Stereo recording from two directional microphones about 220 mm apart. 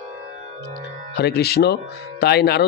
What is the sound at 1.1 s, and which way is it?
A man's voice, 45° left (ahead or behind).